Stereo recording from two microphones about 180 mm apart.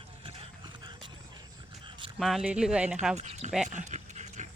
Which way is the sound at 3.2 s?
35° right (ahead or behind).